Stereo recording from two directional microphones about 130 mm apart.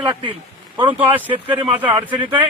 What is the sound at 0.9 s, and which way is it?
Speech, 15° right (ahead or behind).